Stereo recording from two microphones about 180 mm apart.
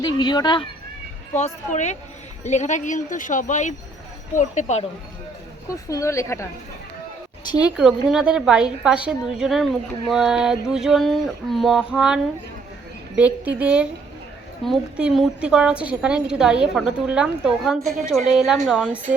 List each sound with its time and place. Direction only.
0.0 s speech: 25° left (ahead or behind)
1.4 s speech: 40° left (ahead or behind)
5.7 s a woman's voice: 20° left (ahead or behind)
7.8 s a woman's voice: 5° right (ahead or behind)